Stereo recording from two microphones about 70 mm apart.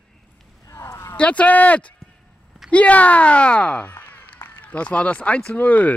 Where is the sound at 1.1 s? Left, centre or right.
Centre.